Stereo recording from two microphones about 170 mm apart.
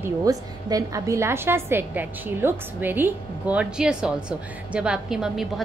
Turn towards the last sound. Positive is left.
turn(degrees=0)  # may be behind; listen again after turning